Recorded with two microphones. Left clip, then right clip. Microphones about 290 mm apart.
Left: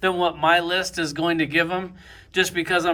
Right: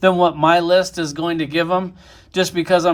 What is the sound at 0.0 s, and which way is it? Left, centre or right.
Speech, right.